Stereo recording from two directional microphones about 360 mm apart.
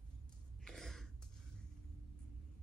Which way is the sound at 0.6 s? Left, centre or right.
Centre.